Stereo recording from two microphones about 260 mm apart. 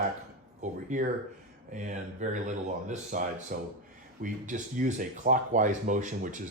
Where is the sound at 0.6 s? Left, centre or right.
Right.